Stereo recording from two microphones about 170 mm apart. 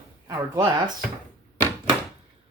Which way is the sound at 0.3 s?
20° right (ahead or behind).